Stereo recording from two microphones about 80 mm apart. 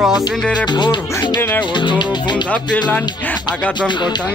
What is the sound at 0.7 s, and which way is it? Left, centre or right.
Music, left.